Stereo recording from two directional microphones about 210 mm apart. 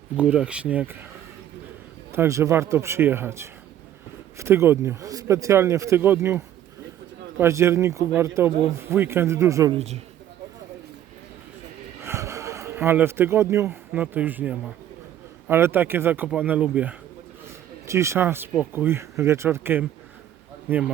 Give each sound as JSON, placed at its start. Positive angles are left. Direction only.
{"t": 0.2, "sound": "speech", "side_deg": -5}
{"t": 2.1, "sound": "speech", "side_deg": -15}
{"t": 9.7, "sound": "a woman's voice", "side_deg": -30}
{"t": 12.0, "sound": "speech", "side_deg": -15}